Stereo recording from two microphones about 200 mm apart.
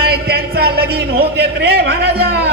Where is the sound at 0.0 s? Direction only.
50° right (ahead or behind).